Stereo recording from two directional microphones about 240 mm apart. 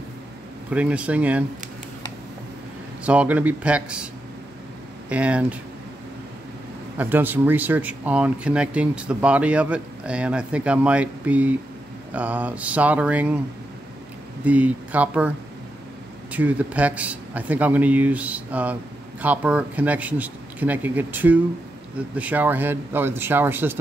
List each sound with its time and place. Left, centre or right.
0.7 s speech: centre
3.0 s speech: centre
5.1 s speech: centre
7.0 s a man's voice: centre
14.4 s a man's voice: centre